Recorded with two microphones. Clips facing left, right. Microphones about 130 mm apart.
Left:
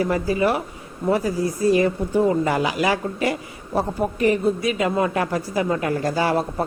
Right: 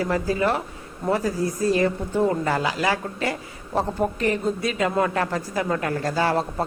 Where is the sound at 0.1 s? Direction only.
15° left (ahead or behind).